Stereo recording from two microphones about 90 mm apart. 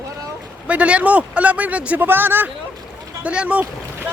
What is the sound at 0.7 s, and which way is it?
Speech, 15° right (ahead or behind).